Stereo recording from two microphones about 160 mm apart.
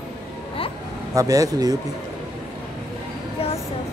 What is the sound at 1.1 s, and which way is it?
Speech, 20° right (ahead or behind).